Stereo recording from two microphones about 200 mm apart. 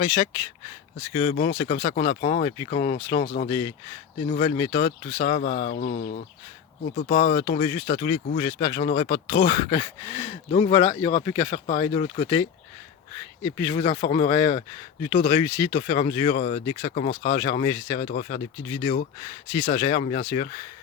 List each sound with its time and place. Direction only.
1.1 s speech: 30° left (ahead or behind)
13.4 s speech: 15° left (ahead or behind)
18.1 s speech: 40° left (ahead or behind)
18.7 s speech: 25° left (ahead or behind)